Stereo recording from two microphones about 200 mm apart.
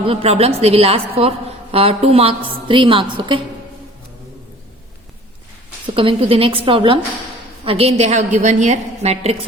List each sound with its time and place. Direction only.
0.0 s a woman's voice: 30° right (ahead or behind)
6.0 s a woman's voice: 30° right (ahead or behind)